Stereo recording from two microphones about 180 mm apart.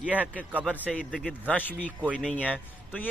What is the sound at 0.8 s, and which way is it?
A man's voice, 5° left (ahead or behind).